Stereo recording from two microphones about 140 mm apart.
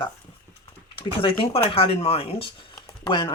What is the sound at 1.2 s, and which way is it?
Speech, 40° left (ahead or behind).